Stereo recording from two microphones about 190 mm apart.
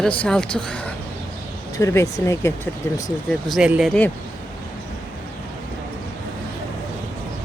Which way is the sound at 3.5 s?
5° right (ahead or behind).